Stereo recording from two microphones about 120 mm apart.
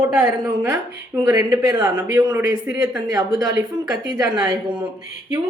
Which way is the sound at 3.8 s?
30° right (ahead or behind).